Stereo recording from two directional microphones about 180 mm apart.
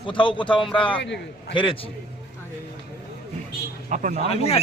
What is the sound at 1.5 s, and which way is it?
Speech, 30° left (ahead or behind).